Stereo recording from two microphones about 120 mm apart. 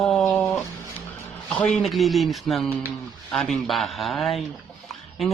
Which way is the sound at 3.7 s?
Centre (ahead or behind).